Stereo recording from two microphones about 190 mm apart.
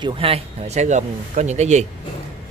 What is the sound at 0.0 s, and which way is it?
A man's voice, 30° right (ahead or behind).